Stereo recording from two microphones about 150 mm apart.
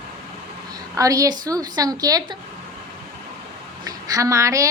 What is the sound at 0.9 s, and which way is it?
A woman's voice, 20° right (ahead or behind).